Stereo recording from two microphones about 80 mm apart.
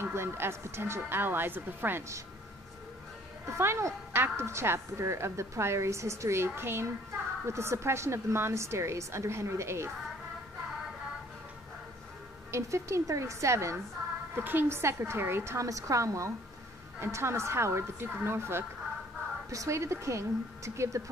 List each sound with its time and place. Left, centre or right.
0.0 s speech: right
3.4 s a woman's voice: right
12.4 s a woman's voice: right
14.3 s a woman's voice: right